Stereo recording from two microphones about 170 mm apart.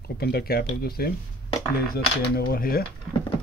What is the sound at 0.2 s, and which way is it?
Speech, 65° left (ahead or behind).